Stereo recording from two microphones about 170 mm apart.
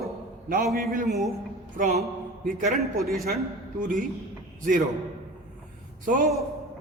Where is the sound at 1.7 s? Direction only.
50° right (ahead or behind).